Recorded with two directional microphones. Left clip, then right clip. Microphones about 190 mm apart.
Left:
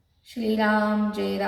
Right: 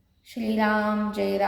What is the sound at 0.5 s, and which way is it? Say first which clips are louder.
Speech: left 1 dB; 35° right (ahead or behind).